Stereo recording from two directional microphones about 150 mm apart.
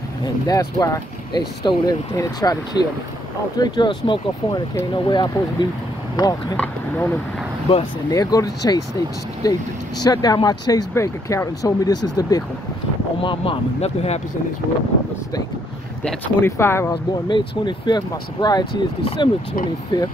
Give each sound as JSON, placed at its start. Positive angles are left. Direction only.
{"t": 0.2, "sound": "speech", "side_deg": 25}
{"t": 6.5, "sound": "speech", "side_deg": 10}
{"t": 8.1, "sound": "speech", "side_deg": 25}
{"t": 13.2, "sound": "speech", "side_deg": 35}
{"t": 16.0, "sound": "speech", "side_deg": 5}
{"t": 16.4, "sound": "speech", "side_deg": 15}
{"t": 16.9, "sound": "speech", "side_deg": 30}